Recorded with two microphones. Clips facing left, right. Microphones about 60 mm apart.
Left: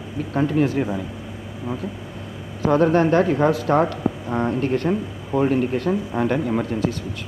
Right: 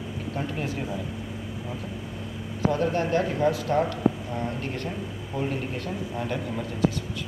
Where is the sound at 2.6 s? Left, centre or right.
Left.